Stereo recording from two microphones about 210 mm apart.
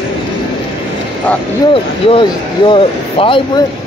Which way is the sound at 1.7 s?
25° left (ahead or behind).